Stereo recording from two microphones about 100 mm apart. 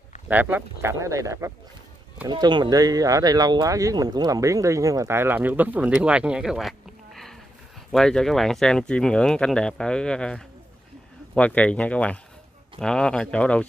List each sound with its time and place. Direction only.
0.3 s speech: 20° right (ahead or behind)
1.0 s speech: 30° right (ahead or behind)
2.2 s speech: 45° right (ahead or behind)
5.1 s speech: 20° right (ahead or behind)
7.9 s speech: 5° left (ahead or behind)